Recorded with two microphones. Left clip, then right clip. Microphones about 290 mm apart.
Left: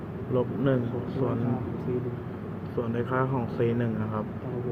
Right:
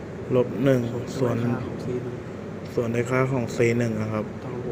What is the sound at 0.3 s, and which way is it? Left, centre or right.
Speech, centre.